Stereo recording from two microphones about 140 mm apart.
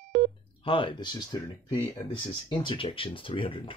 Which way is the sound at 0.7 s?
40° left (ahead or behind).